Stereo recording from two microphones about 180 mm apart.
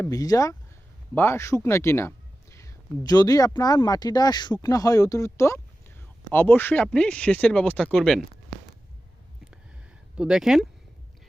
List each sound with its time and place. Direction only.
0.0 s speech: 20° left (ahead or behind); by 8.2 s 5° left (ahead or behind)
10.2 s speech: 5° right (ahead or behind)